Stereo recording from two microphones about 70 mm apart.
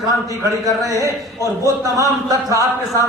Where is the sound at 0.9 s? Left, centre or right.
Right.